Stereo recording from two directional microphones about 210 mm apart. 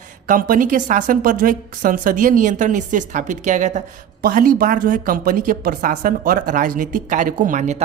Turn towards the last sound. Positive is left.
turn(degrees=-35)  # may be behind; listen again after turning